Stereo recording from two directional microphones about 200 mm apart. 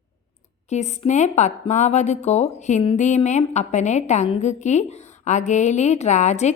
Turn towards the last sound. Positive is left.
turn(degrees=35)  # may be behind; listen again after turning